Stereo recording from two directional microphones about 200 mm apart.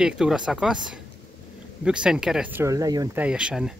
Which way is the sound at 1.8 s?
5° right (ahead or behind).